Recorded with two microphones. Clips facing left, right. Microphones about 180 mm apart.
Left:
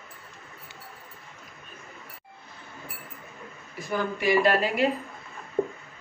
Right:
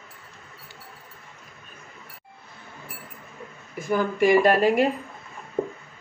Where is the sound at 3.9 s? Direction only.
50° right (ahead or behind).